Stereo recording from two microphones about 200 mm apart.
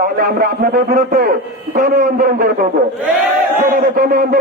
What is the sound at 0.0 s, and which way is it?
A man's voice, 45° right (ahead or behind).